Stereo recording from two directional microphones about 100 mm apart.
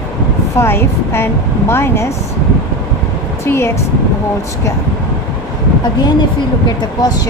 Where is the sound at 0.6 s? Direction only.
25° left (ahead or behind).